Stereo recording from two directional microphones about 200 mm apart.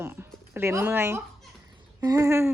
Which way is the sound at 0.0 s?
10° right (ahead or behind).